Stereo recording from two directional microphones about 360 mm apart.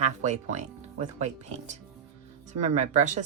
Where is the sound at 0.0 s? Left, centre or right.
Centre.